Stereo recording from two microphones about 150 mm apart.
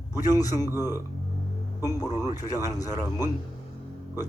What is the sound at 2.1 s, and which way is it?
Speech, 15° right (ahead or behind).